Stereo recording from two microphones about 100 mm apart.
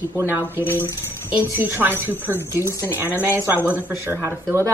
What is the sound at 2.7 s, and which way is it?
Speech, 30° left (ahead or behind).